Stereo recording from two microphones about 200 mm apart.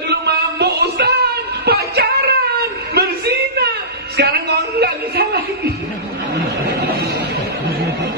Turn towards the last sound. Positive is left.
turn(degrees=-55)  # may be behind; listen again after turning